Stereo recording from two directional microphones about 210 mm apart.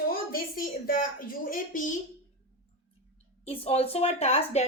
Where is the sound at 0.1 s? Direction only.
45° left (ahead or behind).